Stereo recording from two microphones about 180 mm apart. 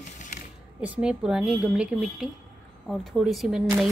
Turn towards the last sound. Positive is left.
turn(degrees=-5)  # may be behind; listen again after turning